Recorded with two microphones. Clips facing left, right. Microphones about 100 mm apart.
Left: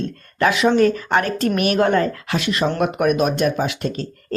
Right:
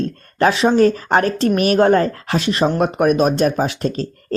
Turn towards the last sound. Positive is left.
turn(degrees=-35)  # may be behind; listen again after turning